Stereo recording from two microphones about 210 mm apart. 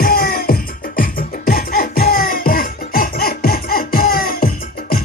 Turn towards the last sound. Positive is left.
turn(degrees=40)  # may be behind; listen again after turning